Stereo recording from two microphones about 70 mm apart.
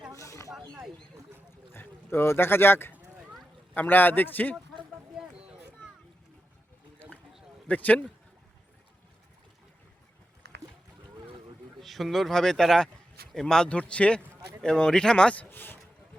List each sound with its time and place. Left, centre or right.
0.2 s snake: left
1.7 s a man's voice: left
5.2 s a sound: centre
7.7 s a man's voice: left
11.8 s speech: centre
15.4 s a sound: left